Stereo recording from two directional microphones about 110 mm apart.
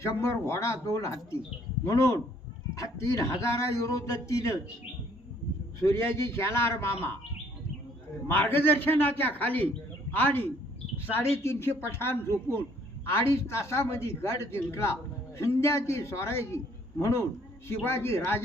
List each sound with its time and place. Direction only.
0.0 s a man's voice: 25° left (ahead or behind)
5.8 s a man's voice: 25° left (ahead or behind)
8.3 s a man's voice: 20° left (ahead or behind)
17.7 s a man's voice: 25° left (ahead or behind)